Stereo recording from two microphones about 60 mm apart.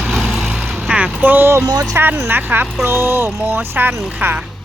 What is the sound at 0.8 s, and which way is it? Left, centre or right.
Vehicle, centre.